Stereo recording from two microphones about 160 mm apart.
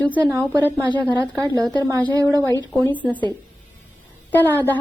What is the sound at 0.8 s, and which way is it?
Speech, 30° right (ahead or behind).